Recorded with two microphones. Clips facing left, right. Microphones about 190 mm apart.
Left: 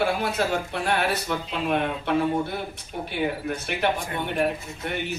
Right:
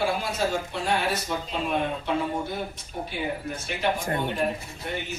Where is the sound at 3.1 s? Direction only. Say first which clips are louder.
Left 5 dB; 60° left (ahead or behind).